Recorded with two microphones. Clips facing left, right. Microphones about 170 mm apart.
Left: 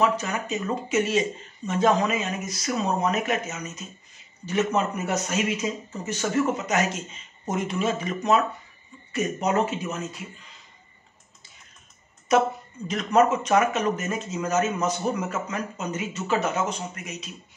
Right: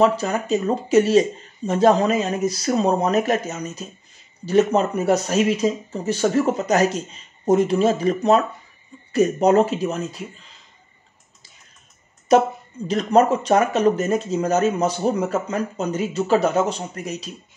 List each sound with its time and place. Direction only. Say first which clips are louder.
0.0 s speech: right 6 dB; 35° right (ahead or behind)
12.3 s speech: right 5 dB; 35° right (ahead or behind)